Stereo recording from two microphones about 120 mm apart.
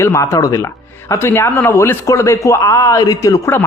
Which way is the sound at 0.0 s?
25° left (ahead or behind).